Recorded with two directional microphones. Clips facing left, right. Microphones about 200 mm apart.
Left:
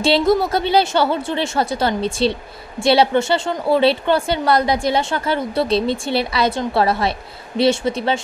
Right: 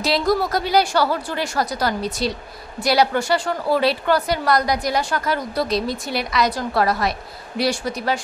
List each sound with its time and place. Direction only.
0.0 s a woman's voice: 25° left (ahead or behind)